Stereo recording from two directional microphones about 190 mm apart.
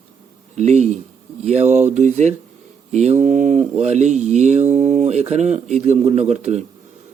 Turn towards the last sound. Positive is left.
turn(degrees=-35)  # may be behind; listen again after turning